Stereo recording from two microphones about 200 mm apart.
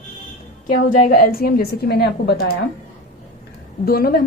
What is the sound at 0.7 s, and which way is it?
Speech, 45° left (ahead or behind).